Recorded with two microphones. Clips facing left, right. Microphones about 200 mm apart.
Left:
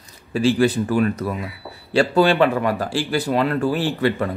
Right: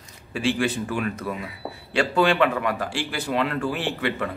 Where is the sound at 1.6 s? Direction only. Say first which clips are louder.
Right 3 dB; 50° right (ahead or behind).